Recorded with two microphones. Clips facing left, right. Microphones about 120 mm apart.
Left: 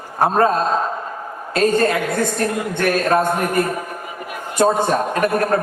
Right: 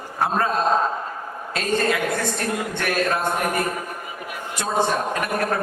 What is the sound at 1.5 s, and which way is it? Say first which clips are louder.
A man's voice: left 6 dB; 45° left (ahead or behind).